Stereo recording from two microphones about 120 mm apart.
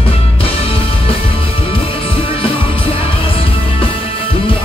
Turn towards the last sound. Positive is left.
turn(degrees=50)  # may be behind; listen again after turning